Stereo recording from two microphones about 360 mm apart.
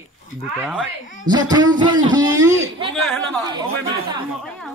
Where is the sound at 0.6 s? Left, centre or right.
Centre.